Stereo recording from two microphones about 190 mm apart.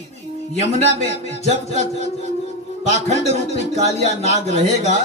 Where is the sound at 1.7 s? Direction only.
35° right (ahead or behind).